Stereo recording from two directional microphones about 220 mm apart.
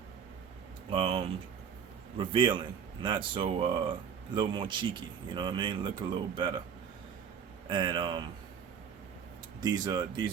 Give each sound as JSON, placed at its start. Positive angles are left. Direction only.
{"t": 0.9, "sound": "speech", "side_deg": -25}
{"t": 7.7, "sound": "speech", "side_deg": -20}
{"t": 9.6, "sound": "speech", "side_deg": -20}